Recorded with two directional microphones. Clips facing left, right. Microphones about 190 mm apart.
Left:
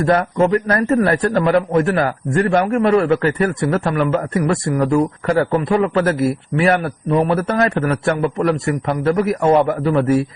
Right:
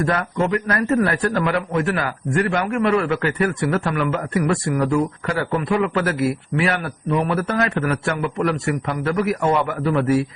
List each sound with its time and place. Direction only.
0.0 s a man's voice: 35° left (ahead or behind)